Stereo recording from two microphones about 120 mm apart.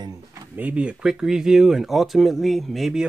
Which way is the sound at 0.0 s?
30° right (ahead or behind).